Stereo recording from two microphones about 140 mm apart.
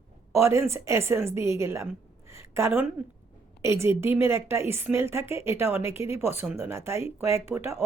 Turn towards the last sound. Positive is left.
turn(degrees=-15)  # may be behind; listen again after turning